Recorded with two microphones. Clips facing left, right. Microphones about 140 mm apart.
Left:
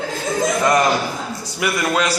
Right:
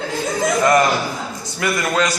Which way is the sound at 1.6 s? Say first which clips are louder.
Even; 10° left (ahead or behind).